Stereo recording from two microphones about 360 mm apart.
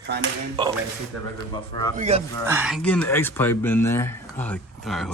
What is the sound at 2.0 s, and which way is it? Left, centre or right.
Speech, centre.